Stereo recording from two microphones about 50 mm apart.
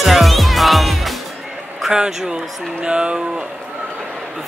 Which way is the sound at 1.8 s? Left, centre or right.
Centre.